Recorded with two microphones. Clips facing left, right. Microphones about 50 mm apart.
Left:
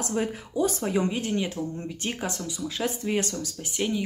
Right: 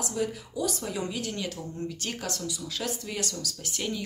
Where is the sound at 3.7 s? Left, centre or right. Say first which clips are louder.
Left 6 dB; centre.